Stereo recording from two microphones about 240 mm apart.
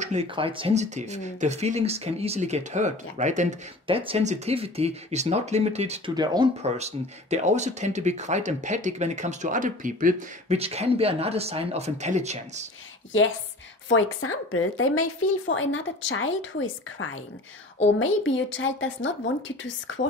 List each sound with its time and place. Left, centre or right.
0.0 s speech: right
13.8 s a woman's voice: left
17.9 s a woman's voice: left